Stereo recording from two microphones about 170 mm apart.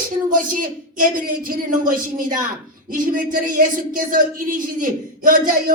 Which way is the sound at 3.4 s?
55° right (ahead or behind).